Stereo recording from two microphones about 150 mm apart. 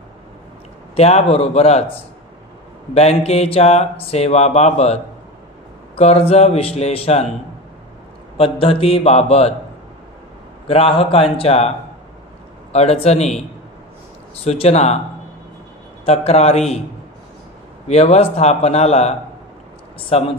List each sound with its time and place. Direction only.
0.9 s speech: 45° left (ahead or behind)
2.9 s speech: 45° left (ahead or behind)
5.9 s speech: 40° left (ahead or behind)
8.4 s speech: 35° left (ahead or behind)
10.7 s speech: 40° left (ahead or behind)
12.7 s speech: 40° left (ahead or behind)
14.4 s speech: 45° left (ahead or behind)
16.1 s speech: 45° left (ahead or behind)
17.8 s speech: 45° left (ahead or behind)